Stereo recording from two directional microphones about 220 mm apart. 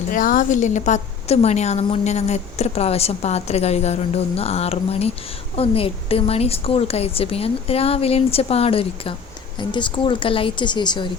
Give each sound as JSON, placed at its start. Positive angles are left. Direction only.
{"t": 0.1, "sound": "a woman's voice", "side_deg": 35}